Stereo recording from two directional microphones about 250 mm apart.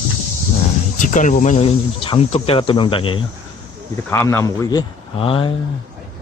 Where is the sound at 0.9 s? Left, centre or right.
Left.